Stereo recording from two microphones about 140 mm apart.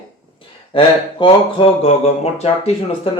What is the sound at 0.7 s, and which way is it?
Speech, 40° left (ahead or behind).